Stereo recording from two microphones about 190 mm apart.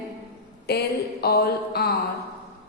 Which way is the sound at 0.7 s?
55° left (ahead or behind).